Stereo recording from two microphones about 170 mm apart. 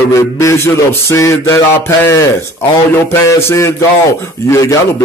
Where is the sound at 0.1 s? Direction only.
15° left (ahead or behind).